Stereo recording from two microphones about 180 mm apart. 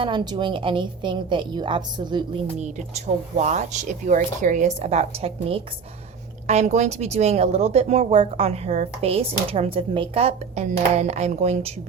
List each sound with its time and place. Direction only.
0.0 s a woman's voice: 25° right (ahead or behind)
2.6 s speech: 40° right (ahead or behind)